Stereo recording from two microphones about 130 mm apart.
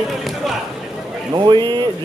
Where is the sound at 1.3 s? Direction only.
35° right (ahead or behind).